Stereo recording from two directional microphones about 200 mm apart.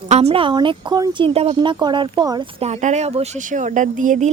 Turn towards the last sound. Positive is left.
turn(degrees=-40)  # may be behind; listen again after turning